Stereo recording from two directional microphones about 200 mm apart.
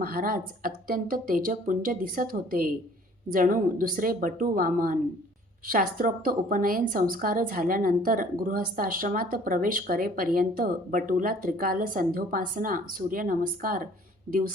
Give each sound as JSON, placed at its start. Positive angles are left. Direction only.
{"t": 0.0, "sound": "a woman's voice", "side_deg": -45}